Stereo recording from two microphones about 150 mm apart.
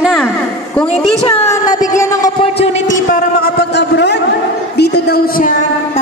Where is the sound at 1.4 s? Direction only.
20° left (ahead or behind).